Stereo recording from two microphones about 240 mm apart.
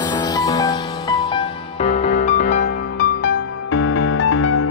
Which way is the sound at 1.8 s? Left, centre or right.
Left.